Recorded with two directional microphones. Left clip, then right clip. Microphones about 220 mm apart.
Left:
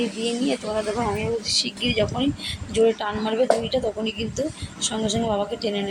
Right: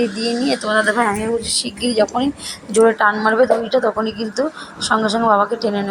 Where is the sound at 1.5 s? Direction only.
20° right (ahead or behind).